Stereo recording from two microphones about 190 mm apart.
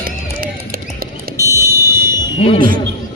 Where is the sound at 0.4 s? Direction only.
50° right (ahead or behind).